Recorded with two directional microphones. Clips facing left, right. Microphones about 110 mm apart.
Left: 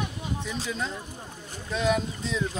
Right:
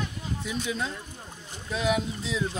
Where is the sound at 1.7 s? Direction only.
5° right (ahead or behind).